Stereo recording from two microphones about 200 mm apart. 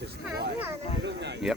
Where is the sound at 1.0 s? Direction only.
60° right (ahead or behind).